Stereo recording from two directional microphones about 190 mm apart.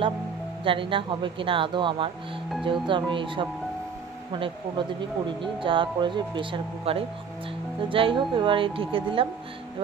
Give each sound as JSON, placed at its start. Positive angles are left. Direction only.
{"t": 0.7, "sound": "speech", "side_deg": -25}